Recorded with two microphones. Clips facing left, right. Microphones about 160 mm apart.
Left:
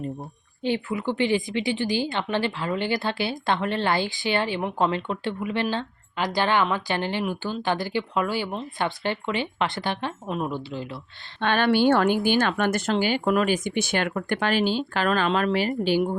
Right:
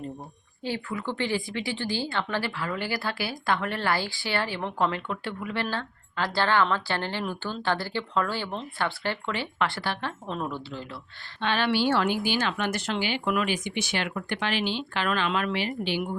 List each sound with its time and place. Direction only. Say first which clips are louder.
0.6 s a woman's voice: left 5 dB; 20° left (ahead or behind)
11.3 s a woman's voice: left 5 dB; 50° left (ahead or behind)